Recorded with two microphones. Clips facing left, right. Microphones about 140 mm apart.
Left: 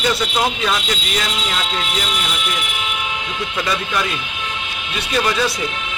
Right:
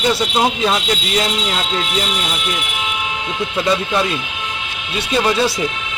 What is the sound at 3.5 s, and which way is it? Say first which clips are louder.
Speech: right 5 dB; 25° right (ahead or behind).